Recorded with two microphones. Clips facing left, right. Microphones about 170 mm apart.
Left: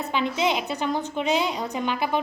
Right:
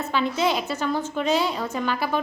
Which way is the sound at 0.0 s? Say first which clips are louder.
Right 1 dB; 15° left (ahead or behind).